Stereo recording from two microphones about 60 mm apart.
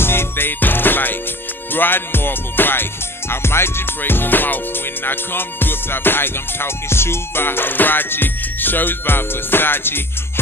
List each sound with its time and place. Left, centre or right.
0.0 s music: left